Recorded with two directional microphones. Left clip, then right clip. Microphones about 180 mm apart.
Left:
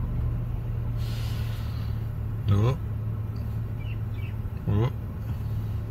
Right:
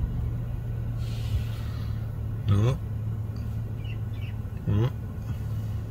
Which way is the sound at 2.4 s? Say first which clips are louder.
Left 1 dB; 30° right (ahead or behind).